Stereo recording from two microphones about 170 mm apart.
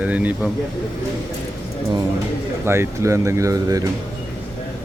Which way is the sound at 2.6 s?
15° right (ahead or behind).